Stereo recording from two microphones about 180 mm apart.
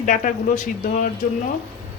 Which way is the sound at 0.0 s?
45° left (ahead or behind).